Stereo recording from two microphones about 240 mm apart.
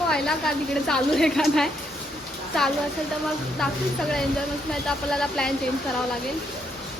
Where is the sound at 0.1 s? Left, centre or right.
Centre.